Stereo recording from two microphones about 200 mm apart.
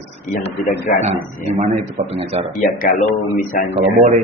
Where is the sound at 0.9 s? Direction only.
50° left (ahead or behind).